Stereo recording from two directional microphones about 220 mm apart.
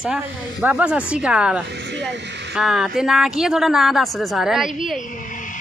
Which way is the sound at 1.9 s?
55° right (ahead or behind).